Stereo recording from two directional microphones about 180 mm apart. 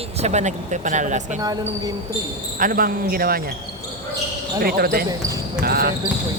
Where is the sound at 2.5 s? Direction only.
50° right (ahead or behind).